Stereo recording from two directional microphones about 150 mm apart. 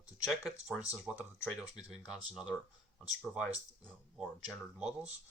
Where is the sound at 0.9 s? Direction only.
5° right (ahead or behind).